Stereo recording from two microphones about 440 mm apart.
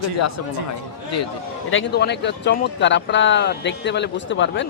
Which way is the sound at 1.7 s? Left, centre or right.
Left.